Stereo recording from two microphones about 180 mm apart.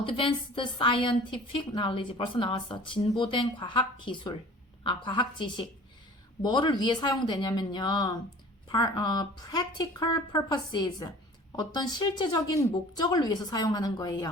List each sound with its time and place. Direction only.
0.0 s speech: 30° left (ahead or behind)